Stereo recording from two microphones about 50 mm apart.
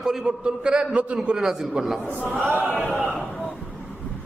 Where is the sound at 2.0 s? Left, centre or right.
Left.